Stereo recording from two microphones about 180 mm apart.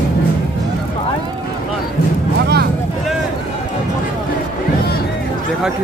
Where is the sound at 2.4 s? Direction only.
65° right (ahead or behind).